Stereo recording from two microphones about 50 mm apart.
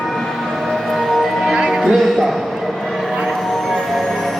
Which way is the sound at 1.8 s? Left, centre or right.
Centre.